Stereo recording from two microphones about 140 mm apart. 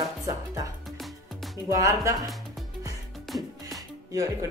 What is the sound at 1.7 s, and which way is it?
Speech, 25° right (ahead or behind).